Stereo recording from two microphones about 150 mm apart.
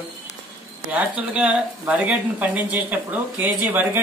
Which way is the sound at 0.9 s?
10° right (ahead or behind).